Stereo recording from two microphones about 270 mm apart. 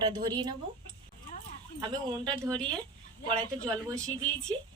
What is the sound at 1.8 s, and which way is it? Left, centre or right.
Speech, centre.